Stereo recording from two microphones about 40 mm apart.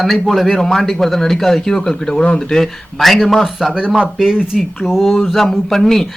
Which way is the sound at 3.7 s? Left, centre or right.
Right.